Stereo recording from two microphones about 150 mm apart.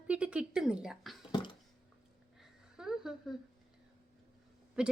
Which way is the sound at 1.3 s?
30° left (ahead or behind).